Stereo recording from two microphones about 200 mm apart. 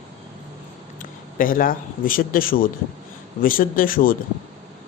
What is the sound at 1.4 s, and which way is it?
Speech, 45° left (ahead or behind).